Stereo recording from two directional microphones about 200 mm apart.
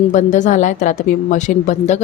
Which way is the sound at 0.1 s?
40° left (ahead or behind).